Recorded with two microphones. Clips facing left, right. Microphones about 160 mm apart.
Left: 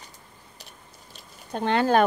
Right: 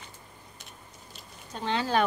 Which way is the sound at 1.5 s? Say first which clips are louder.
Left 6 dB; 55° left (ahead or behind).